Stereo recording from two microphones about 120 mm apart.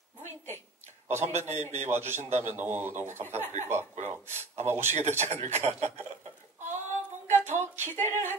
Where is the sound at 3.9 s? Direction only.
75° right (ahead or behind).